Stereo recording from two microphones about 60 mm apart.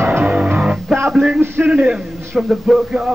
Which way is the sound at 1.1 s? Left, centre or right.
Centre.